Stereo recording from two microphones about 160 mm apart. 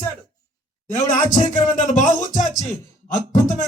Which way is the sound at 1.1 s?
50° left (ahead or behind).